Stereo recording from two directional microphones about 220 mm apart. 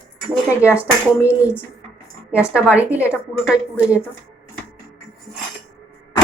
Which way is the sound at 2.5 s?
5° right (ahead or behind).